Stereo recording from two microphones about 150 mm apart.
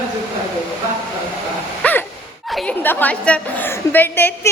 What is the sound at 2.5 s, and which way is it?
A woman's voice, 10° left (ahead or behind).